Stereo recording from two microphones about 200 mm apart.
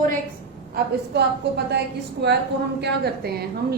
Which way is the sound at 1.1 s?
60° right (ahead or behind).